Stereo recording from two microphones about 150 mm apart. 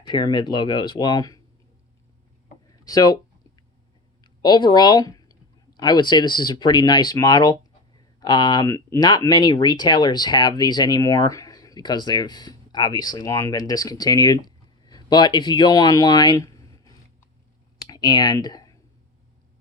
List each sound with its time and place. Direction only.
0.0 s speech: 30° left (ahead or behind)
2.8 s a sound: 25° left (ahead or behind)
4.2 s speech: 30° left (ahead or behind)
17.7 s clicking: 25° left (ahead or behind)